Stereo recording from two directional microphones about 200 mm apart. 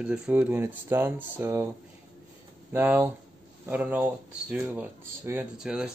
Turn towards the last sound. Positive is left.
turn(degrees=-5)  # may be behind; listen again after turning